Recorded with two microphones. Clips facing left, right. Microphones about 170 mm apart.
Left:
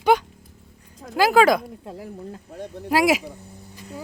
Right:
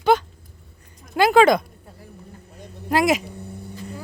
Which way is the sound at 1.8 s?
90° left.